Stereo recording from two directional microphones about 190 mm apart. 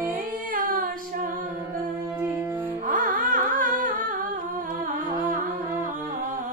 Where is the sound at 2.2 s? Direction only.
10° right (ahead or behind).